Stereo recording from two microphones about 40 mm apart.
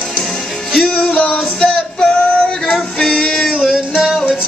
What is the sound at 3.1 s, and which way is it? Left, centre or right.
Music, centre.